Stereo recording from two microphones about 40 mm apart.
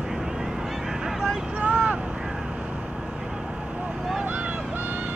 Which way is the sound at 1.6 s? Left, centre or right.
Right.